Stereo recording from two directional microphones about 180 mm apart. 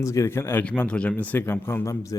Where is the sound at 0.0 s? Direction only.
15° left (ahead or behind).